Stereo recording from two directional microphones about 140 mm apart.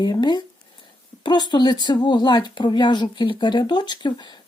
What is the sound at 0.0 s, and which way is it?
Speech, 30° left (ahead or behind).